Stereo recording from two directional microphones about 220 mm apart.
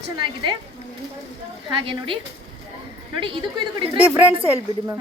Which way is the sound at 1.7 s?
25° right (ahead or behind).